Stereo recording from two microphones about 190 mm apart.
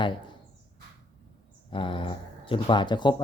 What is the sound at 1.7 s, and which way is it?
Speech, 25° left (ahead or behind).